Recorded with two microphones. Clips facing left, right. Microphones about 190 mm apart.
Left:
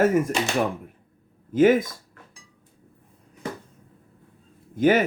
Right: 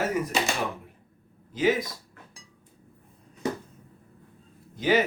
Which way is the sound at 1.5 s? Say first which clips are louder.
Left 7 dB; 50° left (ahead or behind).